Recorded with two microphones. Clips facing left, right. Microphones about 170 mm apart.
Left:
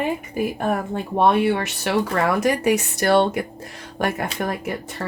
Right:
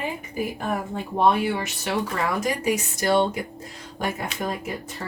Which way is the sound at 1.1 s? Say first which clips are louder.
Left 3 dB; 70° left (ahead or behind).